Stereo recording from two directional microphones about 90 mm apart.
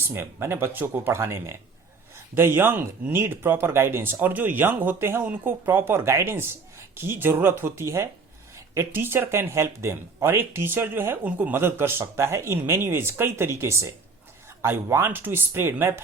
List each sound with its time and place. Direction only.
0.1 s speech: 25° right (ahead or behind)